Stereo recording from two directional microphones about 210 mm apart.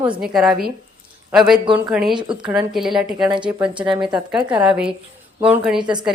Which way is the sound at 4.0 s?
20° right (ahead or behind).